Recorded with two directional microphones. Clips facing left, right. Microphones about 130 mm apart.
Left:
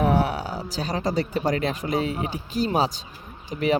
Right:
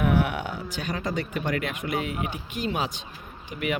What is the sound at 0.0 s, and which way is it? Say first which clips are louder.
Speech: left 2 dB; 35° left (ahead or behind).